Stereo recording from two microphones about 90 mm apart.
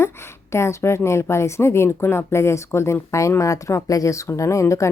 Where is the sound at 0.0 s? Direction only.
30° left (ahead or behind).